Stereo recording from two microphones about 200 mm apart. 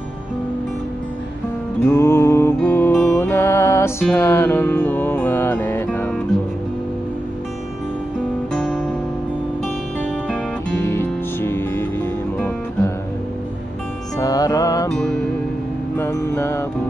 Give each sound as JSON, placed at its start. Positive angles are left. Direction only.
{"t": 1.9, "sound": "music", "side_deg": 10}
{"t": 8.5, "sound": "music", "side_deg": 5}
{"t": 10.9, "sound": "music", "side_deg": 10}
{"t": 14.1, "sound": "music", "side_deg": 20}
{"t": 16.0, "sound": "music", "side_deg": 15}